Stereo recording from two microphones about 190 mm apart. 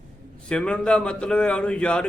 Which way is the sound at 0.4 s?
5° left (ahead or behind).